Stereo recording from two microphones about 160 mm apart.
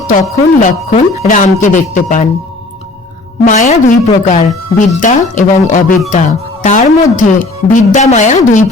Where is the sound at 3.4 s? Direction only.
50° left (ahead or behind).